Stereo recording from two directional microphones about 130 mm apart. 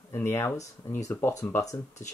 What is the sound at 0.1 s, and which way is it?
Speech, 20° left (ahead or behind).